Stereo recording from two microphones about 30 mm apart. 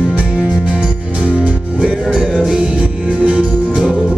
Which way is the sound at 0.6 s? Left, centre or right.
Right.